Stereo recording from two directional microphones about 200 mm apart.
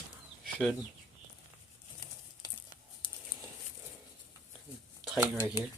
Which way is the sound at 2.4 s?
20° left (ahead or behind).